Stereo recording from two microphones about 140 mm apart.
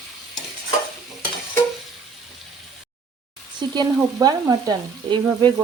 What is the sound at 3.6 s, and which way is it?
Frying, 30° right (ahead or behind).